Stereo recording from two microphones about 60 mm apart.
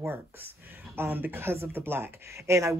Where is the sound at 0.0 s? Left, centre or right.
Right.